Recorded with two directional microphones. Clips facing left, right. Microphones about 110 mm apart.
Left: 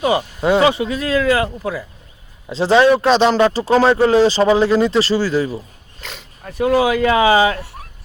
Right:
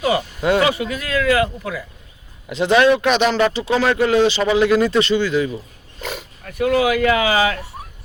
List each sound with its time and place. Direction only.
0.0 s speech: 25° left (ahead or behind)
6.0 s speech: 10° right (ahead or behind)
6.4 s speech: 30° left (ahead or behind)